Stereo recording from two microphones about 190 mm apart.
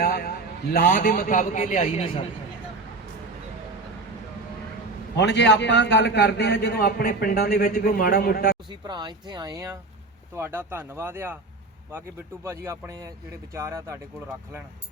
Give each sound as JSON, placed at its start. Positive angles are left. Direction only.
{"t": 0.0, "sound": "a man's voice", "side_deg": 50}
{"t": 5.1, "sound": "a man's voice", "side_deg": 65}
{"t": 8.9, "sound": "speech", "side_deg": -20}